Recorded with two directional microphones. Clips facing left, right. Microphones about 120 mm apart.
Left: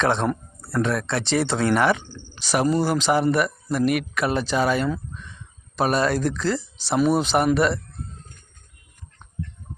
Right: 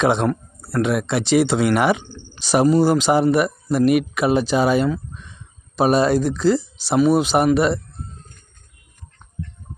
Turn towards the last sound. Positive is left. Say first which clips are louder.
# right 3 dB
turn(degrees=-15)  # may be behind; listen again after turning